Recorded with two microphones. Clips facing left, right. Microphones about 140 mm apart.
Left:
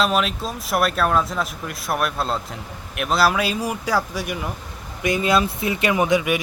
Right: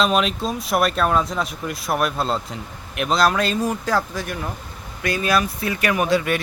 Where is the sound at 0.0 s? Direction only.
Centre (ahead or behind).